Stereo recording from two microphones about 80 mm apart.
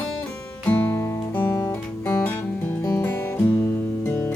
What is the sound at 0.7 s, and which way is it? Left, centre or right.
Guitar, left.